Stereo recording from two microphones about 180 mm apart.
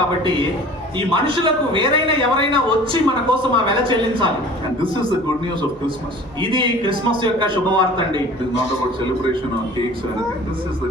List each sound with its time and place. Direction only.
0.9 s a man's voice: 30° right (ahead or behind)
6.4 s a man's voice: 25° right (ahead or behind)